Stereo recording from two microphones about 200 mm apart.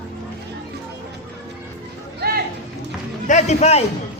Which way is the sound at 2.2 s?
55° right (ahead or behind).